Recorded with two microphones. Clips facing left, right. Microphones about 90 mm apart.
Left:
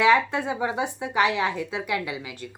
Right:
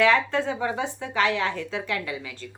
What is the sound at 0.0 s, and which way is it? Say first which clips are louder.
A woman's voice: left 1 dB; 15° left (ahead or behind).